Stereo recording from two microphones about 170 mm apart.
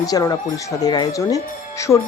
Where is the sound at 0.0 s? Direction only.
20° left (ahead or behind).